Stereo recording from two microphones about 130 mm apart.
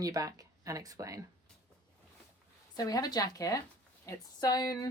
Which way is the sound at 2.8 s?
30° left (ahead or behind).